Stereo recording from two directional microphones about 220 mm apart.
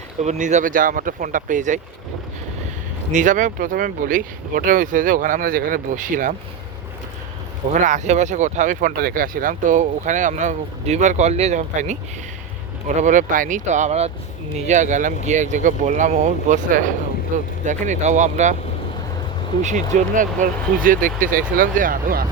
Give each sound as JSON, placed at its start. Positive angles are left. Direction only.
{"t": 0.2, "sound": "speech", "side_deg": -30}
{"t": 3.1, "sound": "speech", "side_deg": -35}
{"t": 7.7, "sound": "speech", "side_deg": -35}
{"t": 13.0, "sound": "speech", "side_deg": -35}
{"t": 19.6, "sound": "speech", "side_deg": -35}